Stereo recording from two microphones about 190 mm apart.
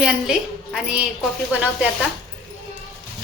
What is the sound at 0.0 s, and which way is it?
A woman's voice, centre (ahead or behind).